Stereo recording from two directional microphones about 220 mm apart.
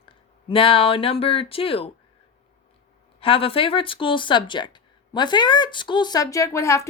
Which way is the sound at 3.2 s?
25° left (ahead or behind).